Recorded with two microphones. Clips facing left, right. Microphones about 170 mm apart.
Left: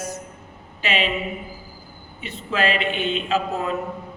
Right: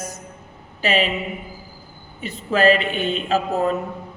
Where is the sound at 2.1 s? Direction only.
40° right (ahead or behind).